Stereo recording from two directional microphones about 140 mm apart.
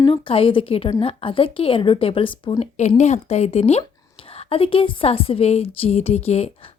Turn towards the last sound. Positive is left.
turn(degrees=50)  # may be behind; listen again after turning